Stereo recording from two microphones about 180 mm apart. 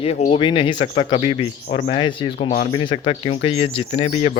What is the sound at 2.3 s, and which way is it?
Speech, 35° left (ahead or behind).